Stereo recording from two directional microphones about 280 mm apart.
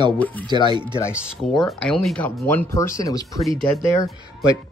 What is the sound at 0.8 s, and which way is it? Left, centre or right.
Speech, centre.